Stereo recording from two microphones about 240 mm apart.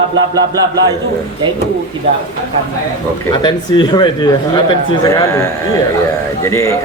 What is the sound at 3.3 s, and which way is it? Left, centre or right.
Speech, centre.